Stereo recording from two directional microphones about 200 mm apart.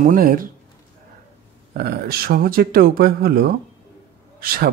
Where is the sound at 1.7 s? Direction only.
50° right (ahead or behind).